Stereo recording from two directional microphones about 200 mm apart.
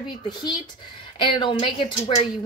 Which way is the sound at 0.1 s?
20° left (ahead or behind).